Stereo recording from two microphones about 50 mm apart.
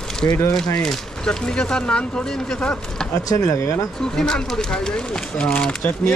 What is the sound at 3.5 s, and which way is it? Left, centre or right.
Speech, left.